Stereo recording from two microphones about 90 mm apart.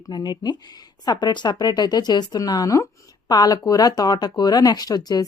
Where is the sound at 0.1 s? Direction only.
55° left (ahead or behind).